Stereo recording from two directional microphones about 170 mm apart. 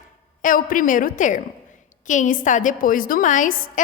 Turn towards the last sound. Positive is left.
turn(degrees=50)  # may be behind; listen again after turning